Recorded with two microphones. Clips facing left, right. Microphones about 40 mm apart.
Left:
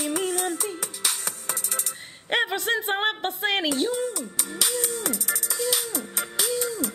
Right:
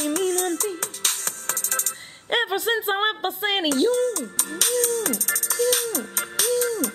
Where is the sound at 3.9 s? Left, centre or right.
Centre.